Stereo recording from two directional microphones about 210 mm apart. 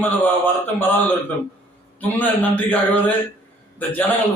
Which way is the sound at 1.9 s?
5° left (ahead or behind).